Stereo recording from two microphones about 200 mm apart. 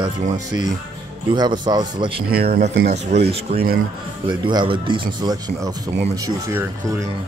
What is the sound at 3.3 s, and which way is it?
Speech, 30° right (ahead or behind).